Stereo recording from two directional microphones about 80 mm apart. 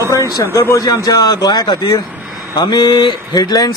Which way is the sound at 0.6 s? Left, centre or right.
Left.